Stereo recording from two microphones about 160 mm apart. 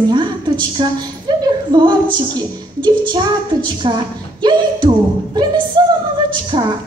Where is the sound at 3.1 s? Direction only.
25° right (ahead or behind).